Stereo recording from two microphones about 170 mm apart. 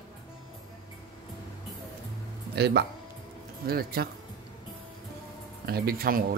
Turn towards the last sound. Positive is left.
turn(degrees=-65)  # may be behind; listen again after turning